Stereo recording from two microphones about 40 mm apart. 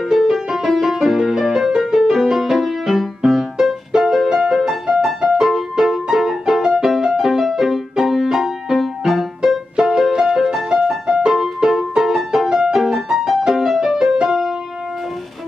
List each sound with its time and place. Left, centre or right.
0.1 s music: centre